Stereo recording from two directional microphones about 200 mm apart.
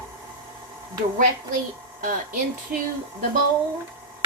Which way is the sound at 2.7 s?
45° right (ahead or behind).